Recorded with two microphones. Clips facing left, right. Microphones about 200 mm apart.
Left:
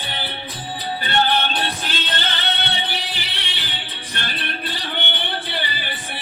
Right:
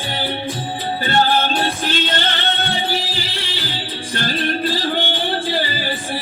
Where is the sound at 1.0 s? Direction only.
40° right (ahead or behind).